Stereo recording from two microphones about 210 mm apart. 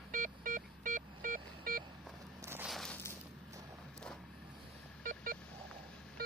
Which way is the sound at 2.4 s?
10° right (ahead or behind).